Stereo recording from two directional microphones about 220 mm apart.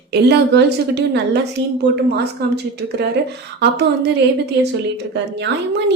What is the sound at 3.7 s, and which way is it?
Speech, 50° right (ahead or behind).